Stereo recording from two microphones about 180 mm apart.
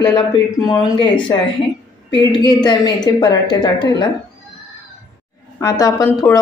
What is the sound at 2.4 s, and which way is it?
Speech, 25° left (ahead or behind).